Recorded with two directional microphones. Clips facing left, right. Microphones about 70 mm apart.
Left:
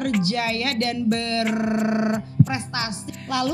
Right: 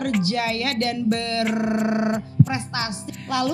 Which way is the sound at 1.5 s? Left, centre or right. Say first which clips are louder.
Even; right.